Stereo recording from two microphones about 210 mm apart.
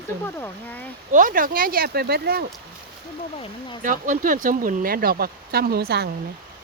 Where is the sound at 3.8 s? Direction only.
40° right (ahead or behind).